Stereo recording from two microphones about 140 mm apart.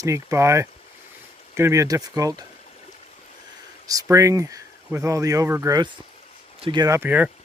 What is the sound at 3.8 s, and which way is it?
Speech, 25° right (ahead or behind).